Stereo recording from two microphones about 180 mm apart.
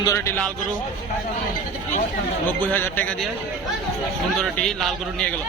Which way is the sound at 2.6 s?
10° left (ahead or behind).